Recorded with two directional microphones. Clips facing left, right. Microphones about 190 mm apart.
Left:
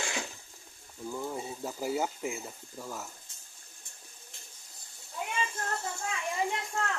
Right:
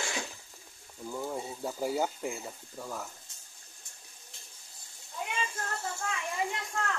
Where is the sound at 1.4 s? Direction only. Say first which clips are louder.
Right 2 dB; centre (ahead or behind).